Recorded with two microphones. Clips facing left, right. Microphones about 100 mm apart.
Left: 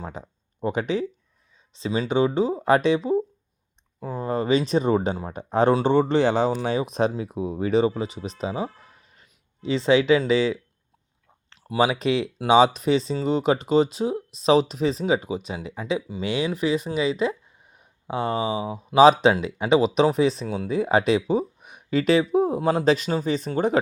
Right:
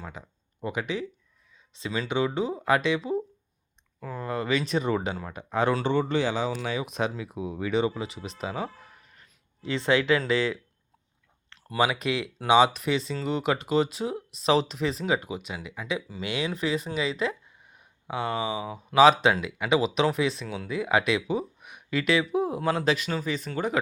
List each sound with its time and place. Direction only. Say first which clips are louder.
0.1 s a sound: left 6 dB; 30° left (ahead or behind)
1.7 s speech: left 5 dB; 25° left (ahead or behind)
5.8 s speech: left 6 dB; 50° left (ahead or behind)
6.5 s speech: left 6 dB; 35° left (ahead or behind)
8.4 s a sound: left 4 dB; 25° left (ahead or behind)
9.6 s speech: left 5 dB; 20° left (ahead or behind)
11.8 s speech: left 4 dB; 25° left (ahead or behind)